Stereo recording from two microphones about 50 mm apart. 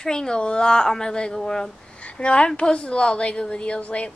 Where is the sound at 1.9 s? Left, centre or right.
Left.